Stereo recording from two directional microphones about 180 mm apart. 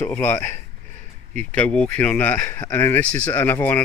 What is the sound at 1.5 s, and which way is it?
Speech, 5° left (ahead or behind).